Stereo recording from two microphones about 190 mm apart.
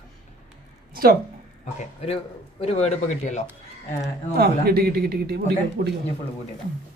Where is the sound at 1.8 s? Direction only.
35° left (ahead or behind).